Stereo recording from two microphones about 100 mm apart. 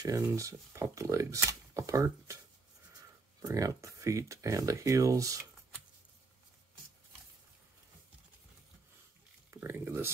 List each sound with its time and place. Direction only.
0.0 s speech: 35° right (ahead or behind)
3.4 s speech: 35° right (ahead or behind)
9.5 s speech: 20° right (ahead or behind)